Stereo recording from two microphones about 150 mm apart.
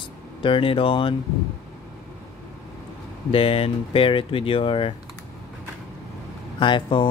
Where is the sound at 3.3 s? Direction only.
40° left (ahead or behind).